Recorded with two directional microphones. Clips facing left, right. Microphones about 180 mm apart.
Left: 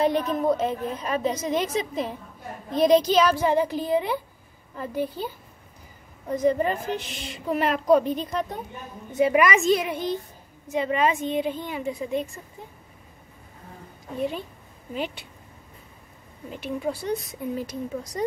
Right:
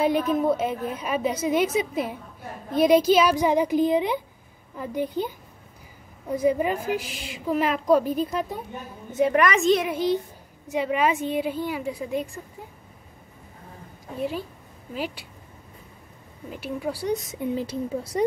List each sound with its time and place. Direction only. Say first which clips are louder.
0.0 s a woman's voice: right 1 dB; 5° right (ahead or behind)
9.1 s a woman's voice: left 1 dB; 5° left (ahead or behind)
15.0 s a woman's voice: even; 5° right (ahead or behind)
16.4 s a woman's voice: left 1 dB; 5° right (ahead or behind)
17.3 s speech: right 3 dB; 25° right (ahead or behind)